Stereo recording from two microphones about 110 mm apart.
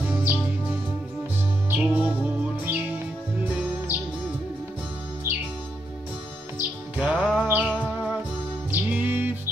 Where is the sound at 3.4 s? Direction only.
15° right (ahead or behind).